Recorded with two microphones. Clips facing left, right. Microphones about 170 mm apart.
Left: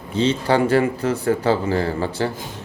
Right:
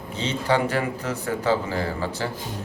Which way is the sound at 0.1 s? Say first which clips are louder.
Left 5 dB; 30° left (ahead or behind).